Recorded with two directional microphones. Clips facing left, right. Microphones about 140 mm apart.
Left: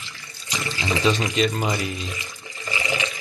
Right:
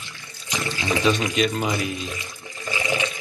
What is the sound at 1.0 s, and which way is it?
Speech, centre (ahead or behind).